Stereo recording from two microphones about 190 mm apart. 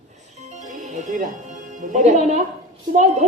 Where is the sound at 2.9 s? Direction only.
40° right (ahead or behind).